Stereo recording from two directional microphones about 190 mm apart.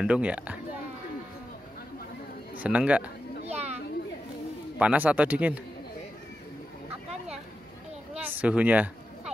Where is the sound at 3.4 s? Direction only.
35° right (ahead or behind).